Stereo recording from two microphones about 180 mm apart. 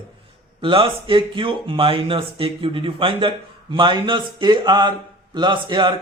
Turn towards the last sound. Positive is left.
turn(degrees=-25)  # may be behind; listen again after turning